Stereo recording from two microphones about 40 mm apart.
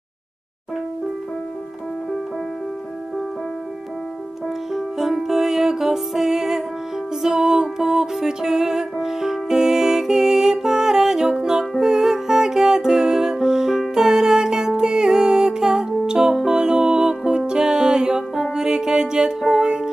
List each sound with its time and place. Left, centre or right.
4.7 s music: centre